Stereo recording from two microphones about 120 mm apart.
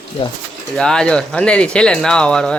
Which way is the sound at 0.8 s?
5° left (ahead or behind).